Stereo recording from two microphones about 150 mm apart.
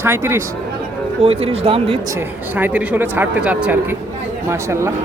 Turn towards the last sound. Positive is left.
turn(degrees=-20)  # may be behind; listen again after turning